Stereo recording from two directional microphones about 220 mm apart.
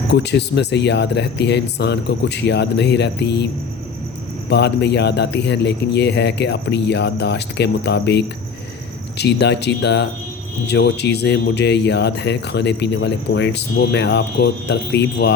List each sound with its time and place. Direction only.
0.1 s speech: 50° left (ahead or behind)